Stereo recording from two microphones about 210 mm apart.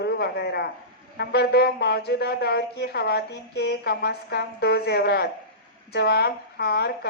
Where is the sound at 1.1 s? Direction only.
50° left (ahead or behind).